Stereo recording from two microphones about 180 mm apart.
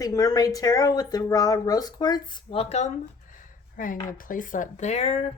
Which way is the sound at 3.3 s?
45° left (ahead or behind).